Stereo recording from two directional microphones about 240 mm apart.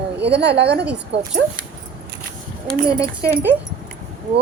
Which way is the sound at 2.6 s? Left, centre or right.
Centre.